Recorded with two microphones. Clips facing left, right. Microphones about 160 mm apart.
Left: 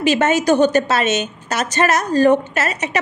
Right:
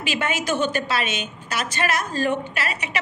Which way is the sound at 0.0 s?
40° left (ahead or behind).